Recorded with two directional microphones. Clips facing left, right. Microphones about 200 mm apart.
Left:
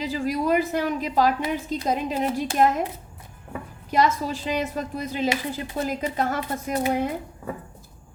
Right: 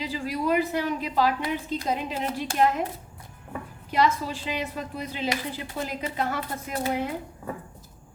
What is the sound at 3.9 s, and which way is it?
A woman's voice, 45° left (ahead or behind).